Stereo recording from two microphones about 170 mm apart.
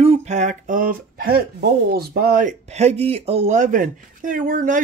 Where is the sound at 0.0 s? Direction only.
40° right (ahead or behind); by 2.5 s 60° right (ahead or behind).